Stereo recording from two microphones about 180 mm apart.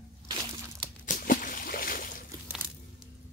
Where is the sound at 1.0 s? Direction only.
45° left (ahead or behind).